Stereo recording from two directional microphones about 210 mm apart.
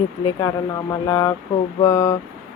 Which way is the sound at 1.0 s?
15° left (ahead or behind).